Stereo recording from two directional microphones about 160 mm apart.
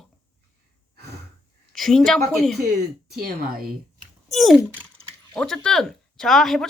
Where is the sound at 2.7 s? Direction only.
80° right.